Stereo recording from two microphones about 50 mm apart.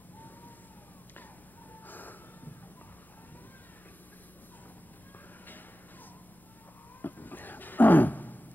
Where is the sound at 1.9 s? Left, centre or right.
Left.